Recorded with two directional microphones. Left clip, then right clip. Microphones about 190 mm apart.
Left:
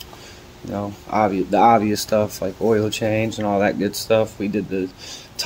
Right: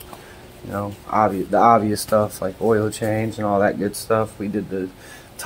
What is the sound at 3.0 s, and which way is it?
Speech, 30° left (ahead or behind).